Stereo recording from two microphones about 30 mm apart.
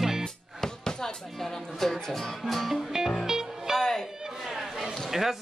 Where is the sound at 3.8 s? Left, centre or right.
Centre.